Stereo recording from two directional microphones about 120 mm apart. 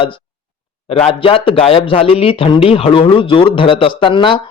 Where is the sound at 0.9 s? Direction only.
55° left (ahead or behind).